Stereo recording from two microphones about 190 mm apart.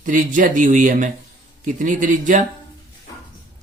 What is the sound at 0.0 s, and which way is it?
Speech, 45° right (ahead or behind).